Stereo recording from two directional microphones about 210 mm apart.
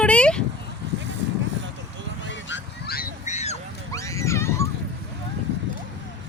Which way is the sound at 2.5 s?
50° left (ahead or behind).